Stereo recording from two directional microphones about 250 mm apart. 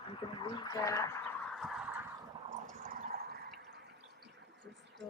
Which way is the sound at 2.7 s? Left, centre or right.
Right.